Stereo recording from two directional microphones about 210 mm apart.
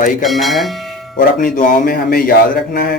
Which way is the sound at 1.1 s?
40° left (ahead or behind).